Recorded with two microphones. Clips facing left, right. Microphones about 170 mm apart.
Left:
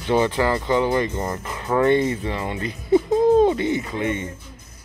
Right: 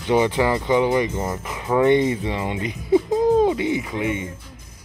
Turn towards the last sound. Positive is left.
turn(degrees=-10)  # may be behind; listen again after turning